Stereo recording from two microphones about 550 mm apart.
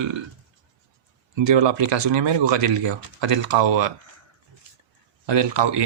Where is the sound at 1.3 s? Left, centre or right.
Right.